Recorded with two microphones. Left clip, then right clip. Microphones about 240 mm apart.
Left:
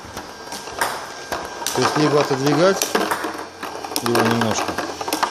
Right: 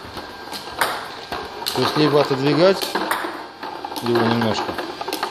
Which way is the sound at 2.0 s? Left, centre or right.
Centre.